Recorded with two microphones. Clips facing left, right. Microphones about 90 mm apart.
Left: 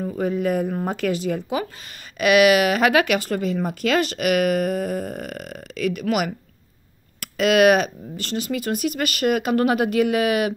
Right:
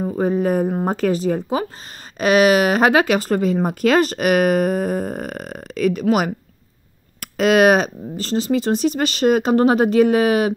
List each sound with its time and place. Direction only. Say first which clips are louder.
0.0 s speech: right 4 dB; 35° right (ahead or behind)